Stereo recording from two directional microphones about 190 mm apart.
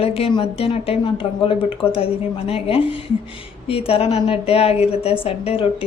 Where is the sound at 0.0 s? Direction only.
30° left (ahead or behind).